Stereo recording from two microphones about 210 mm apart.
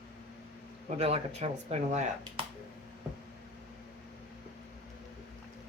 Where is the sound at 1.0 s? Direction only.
30° right (ahead or behind).